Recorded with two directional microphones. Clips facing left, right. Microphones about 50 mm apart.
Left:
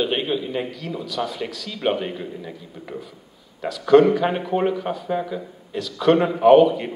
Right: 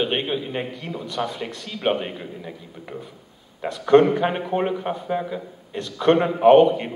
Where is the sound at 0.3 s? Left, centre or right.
Right.